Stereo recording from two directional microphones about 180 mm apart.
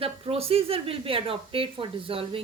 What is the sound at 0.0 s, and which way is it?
A woman's voice, 35° right (ahead or behind).